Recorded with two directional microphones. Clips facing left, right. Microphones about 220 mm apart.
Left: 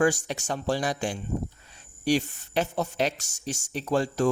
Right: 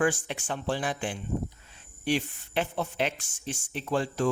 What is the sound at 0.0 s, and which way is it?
Speech, 40° left (ahead or behind).